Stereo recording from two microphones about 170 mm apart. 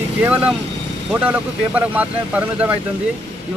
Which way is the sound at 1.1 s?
10° right (ahead or behind).